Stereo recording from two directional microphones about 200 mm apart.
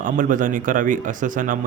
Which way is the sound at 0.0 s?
40° right (ahead or behind).